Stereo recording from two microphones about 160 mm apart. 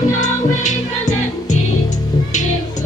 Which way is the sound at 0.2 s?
50° left (ahead or behind).